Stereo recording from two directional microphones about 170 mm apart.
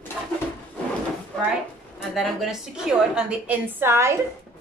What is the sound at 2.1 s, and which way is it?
A woman's voice, centre (ahead or behind).